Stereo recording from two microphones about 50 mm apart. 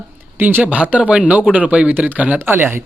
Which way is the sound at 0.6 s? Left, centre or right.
Right.